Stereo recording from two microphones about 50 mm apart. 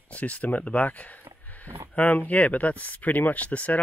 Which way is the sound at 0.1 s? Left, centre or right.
Left.